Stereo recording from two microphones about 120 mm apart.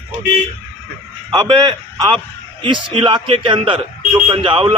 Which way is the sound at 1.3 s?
40° right (ahead or behind).